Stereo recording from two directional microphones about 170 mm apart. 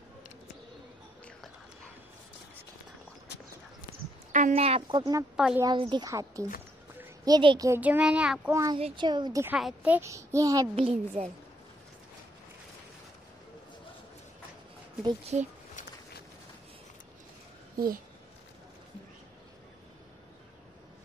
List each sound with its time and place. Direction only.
4.3 s speech: 45° right (ahead or behind); by 5.2 s 25° right (ahead or behind)
5.3 s a woman's voice: 5° right (ahead or behind)
5.6 s speech: 25° right (ahead or behind)
7.8 s a child's voice: 10° right (ahead or behind)
8.7 s speech: 30° right (ahead or behind)
9.6 s a child's voice: 5° right (ahead or behind)
10.8 s speech: 35° right (ahead or behind)
15.3 s speech: 40° right (ahead or behind)